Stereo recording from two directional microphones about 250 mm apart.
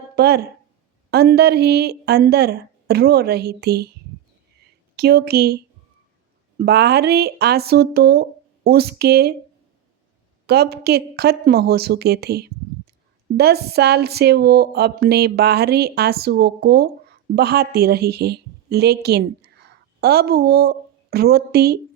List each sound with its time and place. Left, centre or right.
0.2 s speech: right
4.9 s speech: right
6.6 s speech: right
10.4 s a woman's voice: right